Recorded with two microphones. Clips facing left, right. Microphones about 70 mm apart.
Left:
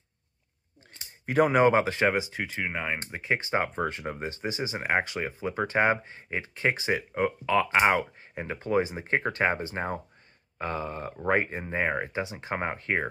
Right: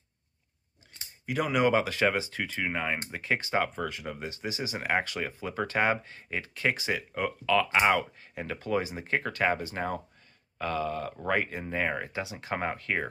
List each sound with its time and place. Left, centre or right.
1.2 s speech: left